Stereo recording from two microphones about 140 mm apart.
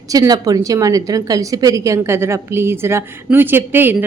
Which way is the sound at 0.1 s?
25° right (ahead or behind).